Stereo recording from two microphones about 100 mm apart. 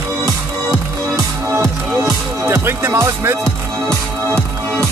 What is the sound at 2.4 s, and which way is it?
Music, 25° right (ahead or behind).